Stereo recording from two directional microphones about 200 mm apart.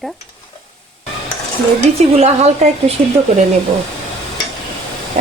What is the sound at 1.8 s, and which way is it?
A woman's voice, 30° right (ahead or behind).